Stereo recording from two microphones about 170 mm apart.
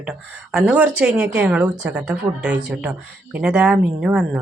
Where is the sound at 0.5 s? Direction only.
5° right (ahead or behind).